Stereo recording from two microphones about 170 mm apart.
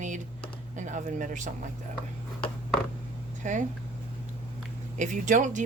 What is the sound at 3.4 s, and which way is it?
Speech, 45° right (ahead or behind).